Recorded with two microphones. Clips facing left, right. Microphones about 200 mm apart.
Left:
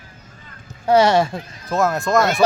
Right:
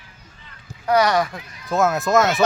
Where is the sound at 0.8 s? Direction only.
25° left (ahead or behind).